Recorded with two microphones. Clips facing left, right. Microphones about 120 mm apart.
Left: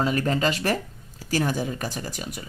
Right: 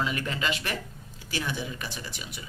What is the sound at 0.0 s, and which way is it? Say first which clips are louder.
Speech: left 7 dB; 40° left (ahead or behind).